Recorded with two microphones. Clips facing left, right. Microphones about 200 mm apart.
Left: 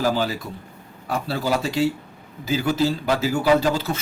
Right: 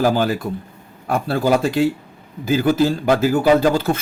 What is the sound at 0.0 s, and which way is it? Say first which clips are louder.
A man's voice: right 5 dB; 50° right (ahead or behind).